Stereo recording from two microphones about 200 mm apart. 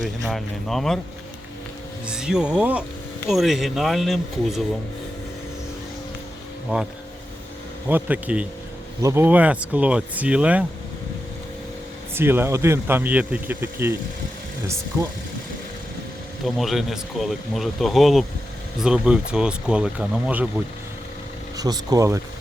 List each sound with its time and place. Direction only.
0.0 s speech: centre (ahead or behind)
2.0 s speech: 5° right (ahead or behind)
7.9 s speech: 10° right (ahead or behind)
12.1 s speech: 10° right (ahead or behind)
16.4 s speech: centre (ahead or behind)
21.5 s speech: 20° right (ahead or behind)